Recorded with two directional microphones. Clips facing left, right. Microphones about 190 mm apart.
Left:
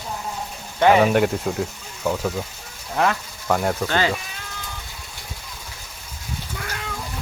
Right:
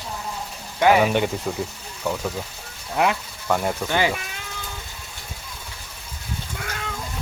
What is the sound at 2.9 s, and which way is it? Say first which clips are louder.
Speech: even; 15° right (ahead or behind).